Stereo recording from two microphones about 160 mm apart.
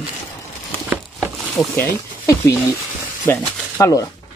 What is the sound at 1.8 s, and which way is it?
Speech, 20° left (ahead or behind).